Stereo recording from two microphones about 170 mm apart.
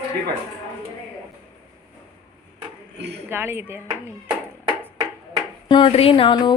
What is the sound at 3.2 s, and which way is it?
Speech, 15° right (ahead or behind).